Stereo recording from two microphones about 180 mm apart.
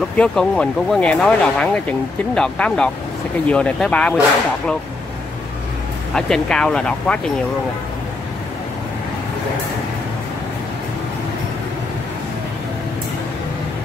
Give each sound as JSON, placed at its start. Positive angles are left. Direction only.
{"t": 0.2, "sound": "speech", "side_deg": 5}
{"t": 6.1, "sound": "speech", "side_deg": 5}